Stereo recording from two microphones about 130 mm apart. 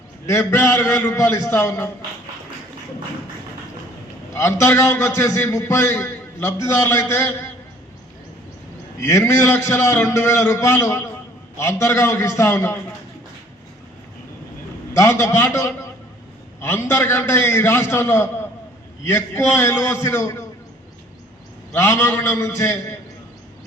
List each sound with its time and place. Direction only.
0.3 s a man's voice: 20° left (ahead or behind)
4.4 s a man's voice: 20° left (ahead or behind)
9.0 s a man's voice: 20° left (ahead or behind)
14.9 s a man's voice: 25° left (ahead or behind)
21.7 s a man's voice: 15° left (ahead or behind)